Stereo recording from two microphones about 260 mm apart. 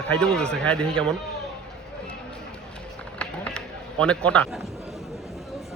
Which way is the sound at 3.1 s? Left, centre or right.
Centre.